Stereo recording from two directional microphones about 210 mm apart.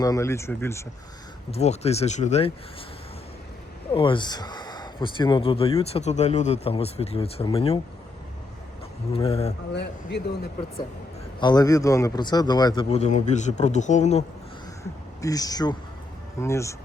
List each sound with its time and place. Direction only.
0.0 s speech: 15° left (ahead or behind)
1.5 s speech: 30° left (ahead or behind)
3.9 s speech: 25° left (ahead or behind)
9.1 s speech: 25° left (ahead or behind)
9.7 s speech: 55° left (ahead or behind)
11.3 s speech: 20° left (ahead or behind)
15.2 s speech: 15° left (ahead or behind)